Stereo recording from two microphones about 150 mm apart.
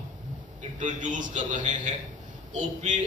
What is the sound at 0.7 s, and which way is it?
A man's voice, 55° right (ahead or behind).